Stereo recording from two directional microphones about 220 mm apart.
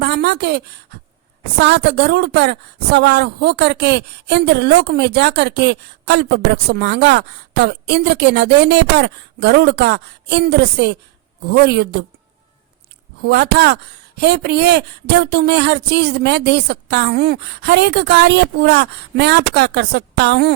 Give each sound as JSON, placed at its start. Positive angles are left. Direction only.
{"t": 0.0, "sound": "a woman's voice", "side_deg": -50}
{"t": 13.2, "sound": "speech", "side_deg": -50}